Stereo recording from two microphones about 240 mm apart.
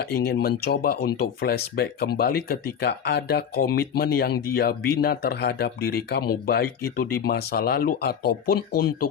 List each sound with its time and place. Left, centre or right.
0.1 s speech: left